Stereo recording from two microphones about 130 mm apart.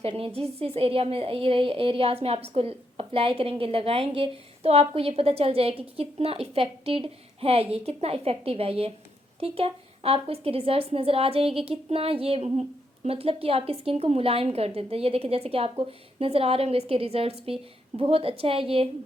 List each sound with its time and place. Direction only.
0.0 s a woman's voice: 50° right (ahead or behind)